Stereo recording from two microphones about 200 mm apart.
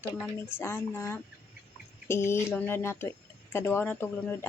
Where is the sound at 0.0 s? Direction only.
10° left (ahead or behind).